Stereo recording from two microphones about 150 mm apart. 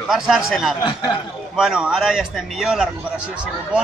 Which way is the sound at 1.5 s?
5° right (ahead or behind).